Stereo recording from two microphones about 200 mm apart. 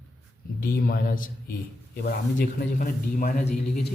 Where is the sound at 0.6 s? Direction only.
45° left (ahead or behind).